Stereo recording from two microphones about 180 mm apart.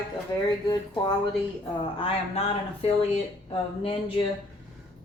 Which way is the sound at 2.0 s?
35° left (ahead or behind).